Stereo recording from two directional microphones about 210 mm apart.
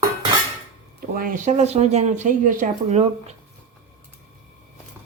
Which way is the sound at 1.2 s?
40° right (ahead or behind).